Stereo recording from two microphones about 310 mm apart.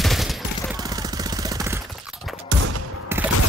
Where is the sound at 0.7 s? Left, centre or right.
Centre.